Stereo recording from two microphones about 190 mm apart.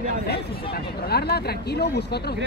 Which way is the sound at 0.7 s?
55° left (ahead or behind).